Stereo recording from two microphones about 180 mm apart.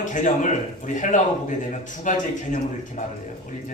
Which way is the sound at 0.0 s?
45° left (ahead or behind).